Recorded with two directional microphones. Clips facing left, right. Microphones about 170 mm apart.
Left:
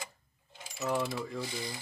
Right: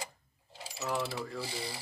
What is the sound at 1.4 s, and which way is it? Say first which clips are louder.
Speech: left 1 dB; 35° right (ahead or behind).